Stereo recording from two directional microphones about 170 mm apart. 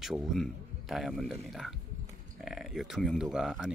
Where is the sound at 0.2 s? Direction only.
Centre (ahead or behind).